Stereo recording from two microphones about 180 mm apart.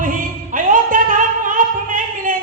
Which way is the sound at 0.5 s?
45° right (ahead or behind).